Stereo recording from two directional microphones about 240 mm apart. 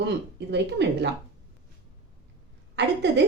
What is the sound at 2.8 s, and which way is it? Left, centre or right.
Speech, right.